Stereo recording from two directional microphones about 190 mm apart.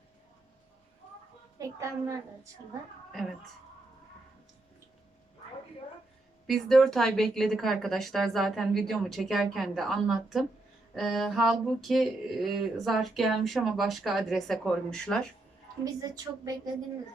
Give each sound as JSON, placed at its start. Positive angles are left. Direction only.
{"t": 1.5, "sound": "a woman's voice", "side_deg": -15}
{"t": 6.5, "sound": "a sound", "side_deg": 0}
{"t": 15.8, "sound": "a woman's voice", "side_deg": -20}